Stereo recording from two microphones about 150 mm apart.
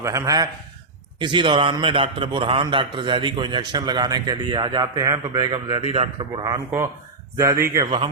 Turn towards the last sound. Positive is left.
turn(degrees=-20)  # may be behind; listen again after turning